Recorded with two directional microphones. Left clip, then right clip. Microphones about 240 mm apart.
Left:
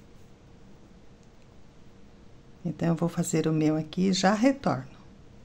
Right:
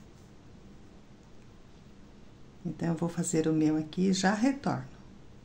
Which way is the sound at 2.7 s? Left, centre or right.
Left.